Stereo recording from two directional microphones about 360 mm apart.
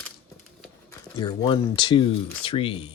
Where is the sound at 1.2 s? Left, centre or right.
Centre.